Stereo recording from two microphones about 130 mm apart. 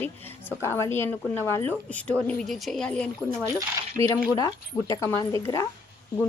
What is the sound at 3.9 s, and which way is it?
Speech, 25° left (ahead or behind).